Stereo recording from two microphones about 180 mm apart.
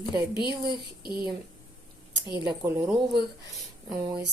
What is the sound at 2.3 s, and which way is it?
Speech, 20° right (ahead or behind).